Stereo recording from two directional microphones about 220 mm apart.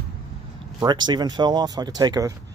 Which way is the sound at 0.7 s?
20° right (ahead or behind).